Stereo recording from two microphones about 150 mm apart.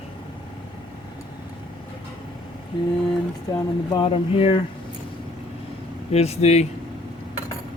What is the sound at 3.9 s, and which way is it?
Speech, 35° left (ahead or behind).